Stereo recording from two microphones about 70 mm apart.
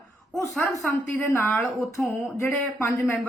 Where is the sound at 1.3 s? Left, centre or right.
Left.